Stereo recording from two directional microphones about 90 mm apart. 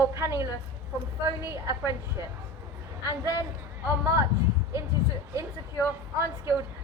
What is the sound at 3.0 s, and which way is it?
Speech, 35° right (ahead or behind).